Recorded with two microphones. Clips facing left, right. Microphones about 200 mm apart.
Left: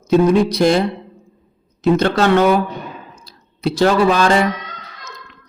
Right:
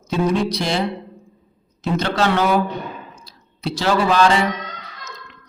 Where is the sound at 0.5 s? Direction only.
50° left (ahead or behind).